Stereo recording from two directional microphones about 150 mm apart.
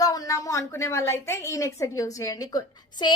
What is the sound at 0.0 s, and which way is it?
A woman's voice, 25° left (ahead or behind).